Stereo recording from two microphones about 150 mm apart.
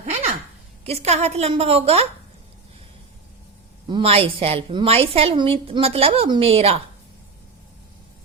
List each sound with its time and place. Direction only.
0.0 s a sound: 45° right (ahead or behind)
0.9 s a woman's voice: 45° right (ahead or behind)
3.8 s a woman's voice: 35° right (ahead or behind)